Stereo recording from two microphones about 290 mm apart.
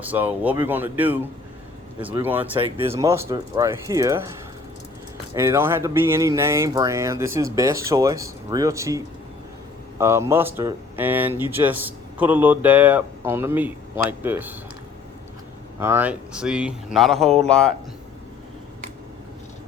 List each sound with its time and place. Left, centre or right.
0.0 s speech: centre
5.3 s speech: centre
10.0 s speech: centre
15.8 s speech: centre